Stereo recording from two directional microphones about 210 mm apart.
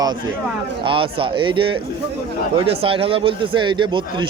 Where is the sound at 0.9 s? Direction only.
25° right (ahead or behind).